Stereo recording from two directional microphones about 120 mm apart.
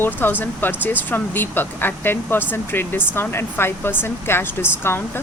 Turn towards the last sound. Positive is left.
turn(degrees=20)  # may be behind; listen again after turning